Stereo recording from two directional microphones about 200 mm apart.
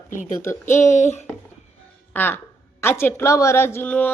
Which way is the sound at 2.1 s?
10° left (ahead or behind).